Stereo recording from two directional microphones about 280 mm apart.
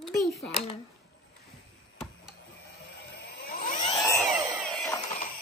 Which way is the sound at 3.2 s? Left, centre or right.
Left.